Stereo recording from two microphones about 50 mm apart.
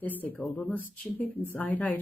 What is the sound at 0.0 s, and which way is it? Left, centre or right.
Speech, left.